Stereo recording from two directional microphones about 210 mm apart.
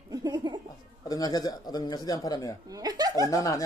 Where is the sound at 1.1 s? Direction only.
20° left (ahead or behind).